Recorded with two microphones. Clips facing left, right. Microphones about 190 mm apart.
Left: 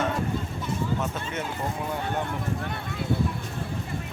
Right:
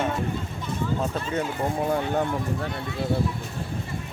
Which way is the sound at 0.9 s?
35° right (ahead or behind).